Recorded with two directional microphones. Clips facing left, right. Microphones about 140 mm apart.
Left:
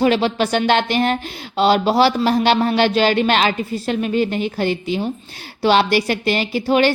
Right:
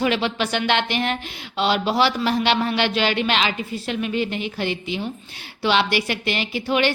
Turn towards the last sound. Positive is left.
turn(degrees=40)  # may be behind; listen again after turning